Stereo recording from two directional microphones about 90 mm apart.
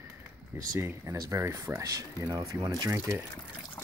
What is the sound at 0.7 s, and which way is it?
Speech, 35° right (ahead or behind).